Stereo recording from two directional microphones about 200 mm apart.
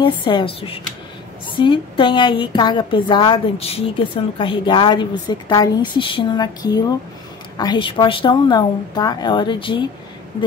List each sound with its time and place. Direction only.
0.0 s a woman's voice: 25° left (ahead or behind)